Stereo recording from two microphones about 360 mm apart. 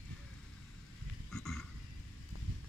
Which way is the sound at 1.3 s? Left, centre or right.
Centre.